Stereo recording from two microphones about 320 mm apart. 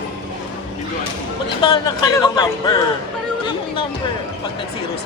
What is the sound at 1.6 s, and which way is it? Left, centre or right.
Speech, centre.